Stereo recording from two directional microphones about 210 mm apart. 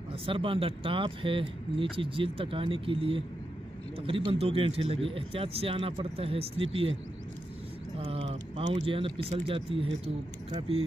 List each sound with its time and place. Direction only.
0.3 s speech: 25° right (ahead or behind)
8.0 s speech: 20° right (ahead or behind)
8.3 s speech: 35° right (ahead or behind)